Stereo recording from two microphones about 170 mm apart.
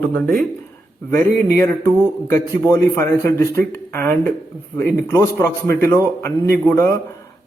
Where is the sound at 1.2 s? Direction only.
15° left (ahead or behind).